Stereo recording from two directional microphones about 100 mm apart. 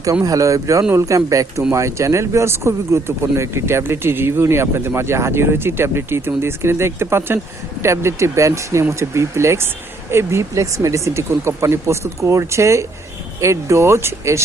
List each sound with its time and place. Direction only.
0.0 s speech: 35° right (ahead or behind)